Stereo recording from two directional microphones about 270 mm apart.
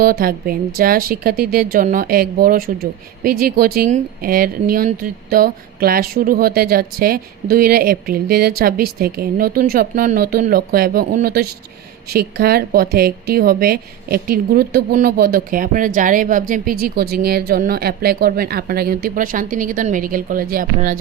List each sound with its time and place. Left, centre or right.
0.0 s speech: right